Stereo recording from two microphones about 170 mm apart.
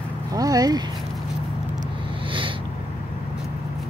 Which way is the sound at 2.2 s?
30° right (ahead or behind).